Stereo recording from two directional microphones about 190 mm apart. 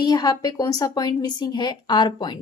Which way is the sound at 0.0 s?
20° left (ahead or behind).